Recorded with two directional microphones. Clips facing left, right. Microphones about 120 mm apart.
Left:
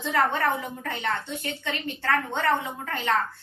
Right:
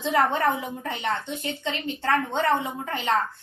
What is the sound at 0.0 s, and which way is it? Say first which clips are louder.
A woman's voice: right 2 dB; 15° right (ahead or behind).